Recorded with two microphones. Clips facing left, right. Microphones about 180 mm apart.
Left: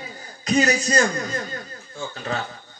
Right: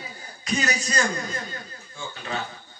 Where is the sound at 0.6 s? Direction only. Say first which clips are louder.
Left 8 dB; 45° left (ahead or behind).